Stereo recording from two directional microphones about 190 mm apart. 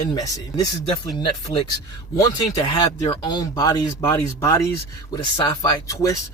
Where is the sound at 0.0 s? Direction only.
20° left (ahead or behind).